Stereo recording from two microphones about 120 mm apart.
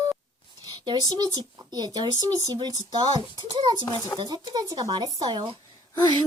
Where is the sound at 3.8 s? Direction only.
35° left (ahead or behind).